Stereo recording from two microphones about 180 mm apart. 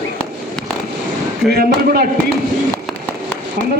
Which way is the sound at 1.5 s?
55° right (ahead or behind).